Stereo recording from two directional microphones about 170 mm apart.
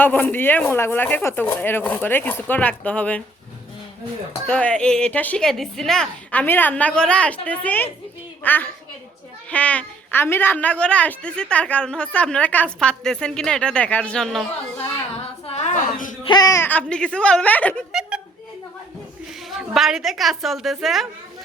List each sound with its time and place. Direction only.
0.0 s a woman's voice: 10° left (ahead or behind)
4.4 s a woman's voice: 5° left (ahead or behind)
14.8 s speech: 35° left (ahead or behind)
16.2 s a woman's voice: 25° left (ahead or behind); by 17.8 s 10° left (ahead or behind)
19.5 s a woman's voice: centre (ahead or behind)